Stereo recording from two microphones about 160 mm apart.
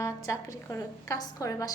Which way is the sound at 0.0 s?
20° left (ahead or behind).